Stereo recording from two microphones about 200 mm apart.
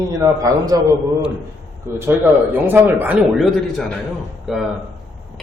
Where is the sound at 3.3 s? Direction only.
5° left (ahead or behind).